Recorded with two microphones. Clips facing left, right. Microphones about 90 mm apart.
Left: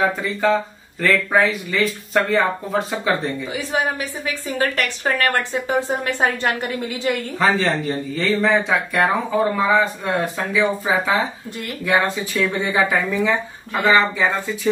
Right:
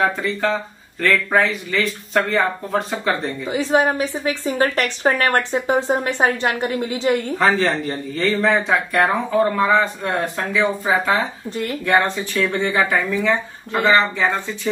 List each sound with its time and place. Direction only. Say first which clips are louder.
0.0 s speech: even; centre (ahead or behind)
3.5 s a woman's voice: right 7 dB; 25° right (ahead or behind)
7.3 s speech: right 1 dB; centre (ahead or behind)
12.5 s speech: right 1 dB; 15° left (ahead or behind)